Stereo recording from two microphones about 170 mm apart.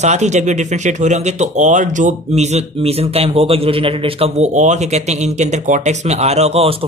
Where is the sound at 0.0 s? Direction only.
40° right (ahead or behind).